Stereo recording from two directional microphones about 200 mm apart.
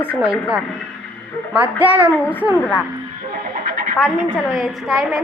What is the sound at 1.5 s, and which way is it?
Speech, 10° right (ahead or behind).